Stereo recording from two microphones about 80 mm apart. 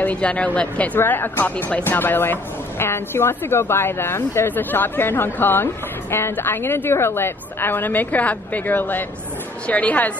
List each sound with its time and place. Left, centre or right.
0.0 s a woman's voice: centre